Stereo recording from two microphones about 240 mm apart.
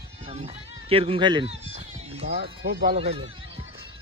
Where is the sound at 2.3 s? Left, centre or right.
Right.